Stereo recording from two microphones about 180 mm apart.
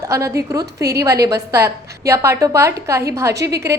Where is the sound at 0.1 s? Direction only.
15° right (ahead or behind).